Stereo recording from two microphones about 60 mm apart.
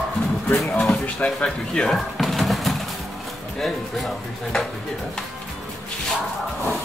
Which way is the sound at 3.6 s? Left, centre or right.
Centre.